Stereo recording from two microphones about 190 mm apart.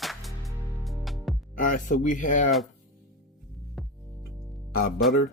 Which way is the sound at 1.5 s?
45° left (ahead or behind).